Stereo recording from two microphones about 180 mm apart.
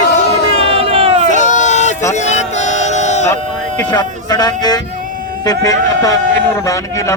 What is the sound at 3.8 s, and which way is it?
Speech, 25° left (ahead or behind).